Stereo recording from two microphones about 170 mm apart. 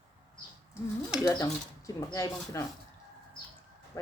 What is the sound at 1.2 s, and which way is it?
Speech, 20° left (ahead or behind).